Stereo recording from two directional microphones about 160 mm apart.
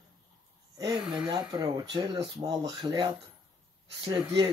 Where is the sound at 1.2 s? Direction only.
25° right (ahead or behind).